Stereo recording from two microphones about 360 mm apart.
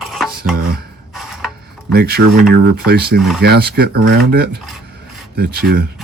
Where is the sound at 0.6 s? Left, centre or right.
Right.